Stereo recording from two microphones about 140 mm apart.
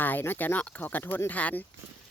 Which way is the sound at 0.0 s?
15° left (ahead or behind).